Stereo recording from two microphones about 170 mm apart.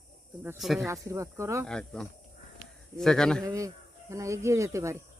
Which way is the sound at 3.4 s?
20° right (ahead or behind).